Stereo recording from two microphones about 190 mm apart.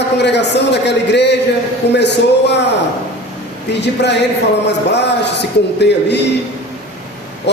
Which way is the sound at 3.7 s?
65° left (ahead or behind).